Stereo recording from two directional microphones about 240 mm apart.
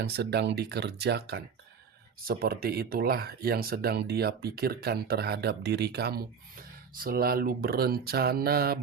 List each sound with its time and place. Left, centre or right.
0.0 s speech: right